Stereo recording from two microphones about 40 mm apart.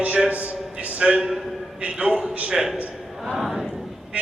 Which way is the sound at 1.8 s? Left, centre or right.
Right.